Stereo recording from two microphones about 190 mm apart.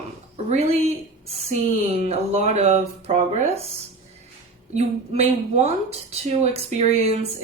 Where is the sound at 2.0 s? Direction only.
35° right (ahead or behind).